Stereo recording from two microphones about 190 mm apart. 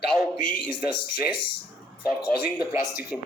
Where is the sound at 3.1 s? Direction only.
Centre (ahead or behind).